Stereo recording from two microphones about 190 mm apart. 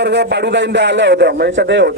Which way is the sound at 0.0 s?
65° right (ahead or behind).